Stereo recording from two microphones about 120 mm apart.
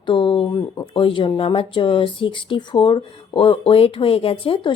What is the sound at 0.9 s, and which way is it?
Speech, 45° left (ahead or behind).